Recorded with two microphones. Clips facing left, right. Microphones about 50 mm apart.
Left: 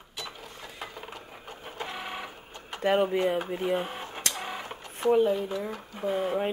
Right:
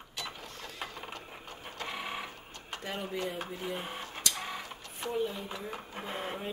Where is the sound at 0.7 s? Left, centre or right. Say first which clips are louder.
Left 1 dB; centre.